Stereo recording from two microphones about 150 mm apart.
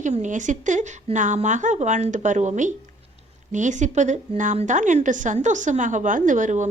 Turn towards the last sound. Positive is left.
turn(degrees=-55)  # may be behind; listen again after turning